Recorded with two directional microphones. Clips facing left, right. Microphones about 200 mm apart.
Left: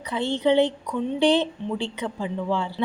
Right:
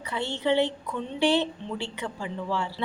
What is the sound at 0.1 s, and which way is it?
A woman's voice, 15° left (ahead or behind).